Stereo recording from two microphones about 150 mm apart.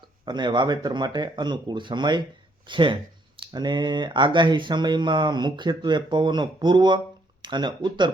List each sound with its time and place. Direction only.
0.3 s speech: 30° right (ahead or behind)